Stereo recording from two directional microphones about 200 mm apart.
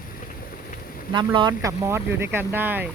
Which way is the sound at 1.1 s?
20° right (ahead or behind).